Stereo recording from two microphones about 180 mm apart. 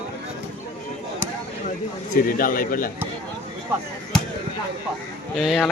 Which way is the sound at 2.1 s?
50° left (ahead or behind).